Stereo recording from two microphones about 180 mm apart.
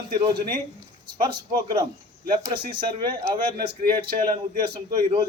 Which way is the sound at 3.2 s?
55° right (ahead or behind).